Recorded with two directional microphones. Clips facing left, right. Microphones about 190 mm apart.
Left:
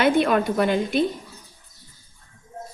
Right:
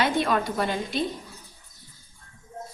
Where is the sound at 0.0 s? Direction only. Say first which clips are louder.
Left 5 dB; 55° left (ahead or behind).